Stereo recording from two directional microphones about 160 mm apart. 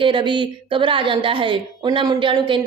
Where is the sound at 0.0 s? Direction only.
30° right (ahead or behind).